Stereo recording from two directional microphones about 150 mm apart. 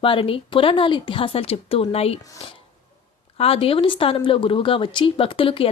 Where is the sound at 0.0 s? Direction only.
35° left (ahead or behind).